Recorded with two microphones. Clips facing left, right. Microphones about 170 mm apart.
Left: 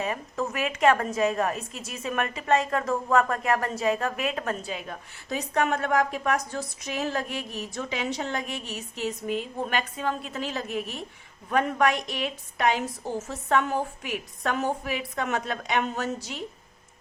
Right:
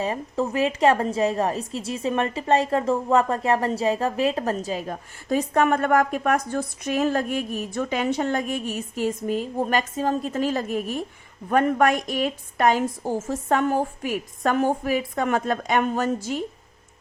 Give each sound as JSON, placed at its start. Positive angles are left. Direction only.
{"t": 0.0, "sound": "a woman's voice", "side_deg": -30}